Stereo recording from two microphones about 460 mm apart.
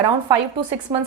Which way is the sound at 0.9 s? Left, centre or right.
Centre.